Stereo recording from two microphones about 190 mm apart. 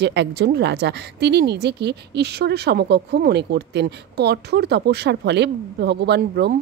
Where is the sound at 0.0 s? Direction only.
65° right (ahead or behind).